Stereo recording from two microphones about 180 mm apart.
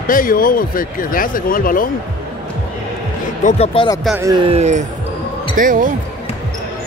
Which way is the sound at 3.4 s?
35° left (ahead or behind).